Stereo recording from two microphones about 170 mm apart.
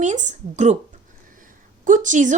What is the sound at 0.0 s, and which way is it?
Speech, 45° right (ahead or behind).